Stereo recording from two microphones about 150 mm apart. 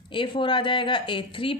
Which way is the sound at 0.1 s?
35° left (ahead or behind).